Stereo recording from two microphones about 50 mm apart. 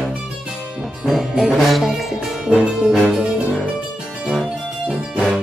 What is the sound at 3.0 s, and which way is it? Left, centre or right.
Music, centre.